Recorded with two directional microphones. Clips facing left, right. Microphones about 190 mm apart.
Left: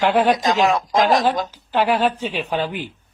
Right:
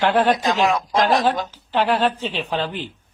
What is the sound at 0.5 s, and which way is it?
Speech, 40° left (ahead or behind).